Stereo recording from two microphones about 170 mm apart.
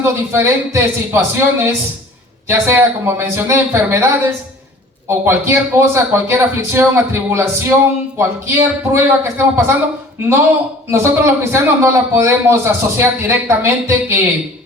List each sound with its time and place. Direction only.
0.0 s a man's voice: 15° right (ahead or behind)
10.9 s a man's voice: 15° right (ahead or behind)